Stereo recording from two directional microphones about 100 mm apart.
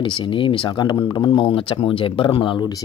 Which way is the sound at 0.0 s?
55° left (ahead or behind).